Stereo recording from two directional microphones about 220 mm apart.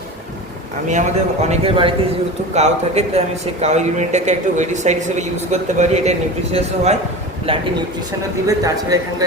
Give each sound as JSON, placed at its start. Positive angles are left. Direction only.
{"t": 0.9, "sound": "a man's voice", "side_deg": -30}
{"t": 8.4, "sound": "a man's voice", "side_deg": -15}